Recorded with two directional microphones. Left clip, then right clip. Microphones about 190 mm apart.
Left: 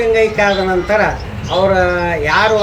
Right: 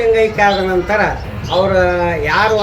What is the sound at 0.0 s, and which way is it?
Speech, centre (ahead or behind).